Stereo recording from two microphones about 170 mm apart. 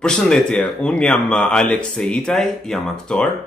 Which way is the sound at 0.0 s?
5° left (ahead or behind).